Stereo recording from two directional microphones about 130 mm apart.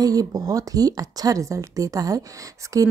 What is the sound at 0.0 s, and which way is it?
Speech, 30° right (ahead or behind).